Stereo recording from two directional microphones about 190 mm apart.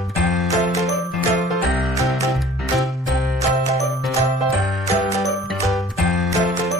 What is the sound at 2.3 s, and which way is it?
Music, centre (ahead or behind).